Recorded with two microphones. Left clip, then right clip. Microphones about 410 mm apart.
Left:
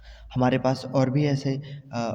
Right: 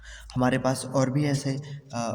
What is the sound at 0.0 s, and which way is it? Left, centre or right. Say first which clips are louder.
A man's voice: left 1 dB; left.